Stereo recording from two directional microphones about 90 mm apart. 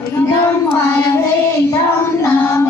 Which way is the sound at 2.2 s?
30° left (ahead or behind).